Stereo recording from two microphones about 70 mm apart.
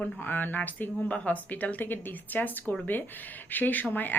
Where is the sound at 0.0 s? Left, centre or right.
Left.